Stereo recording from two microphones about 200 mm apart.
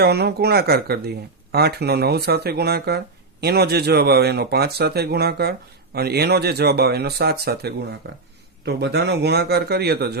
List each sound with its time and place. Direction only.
0.0 s speech: 55° right (ahead or behind)